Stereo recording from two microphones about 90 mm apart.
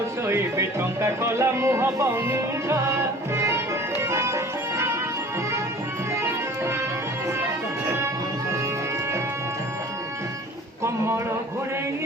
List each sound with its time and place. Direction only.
0.3 s speech: 30° right (ahead or behind)
4.0 s music: 30° right (ahead or behind)
10.8 s a man's voice: 30° right (ahead or behind)